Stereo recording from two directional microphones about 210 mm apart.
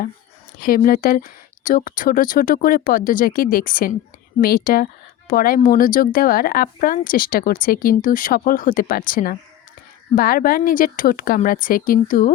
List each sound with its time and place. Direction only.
0.6 s speech: 45° left (ahead or behind)